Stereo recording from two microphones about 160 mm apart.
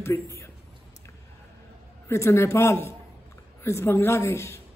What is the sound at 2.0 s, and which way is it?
Speech, 15° left (ahead or behind).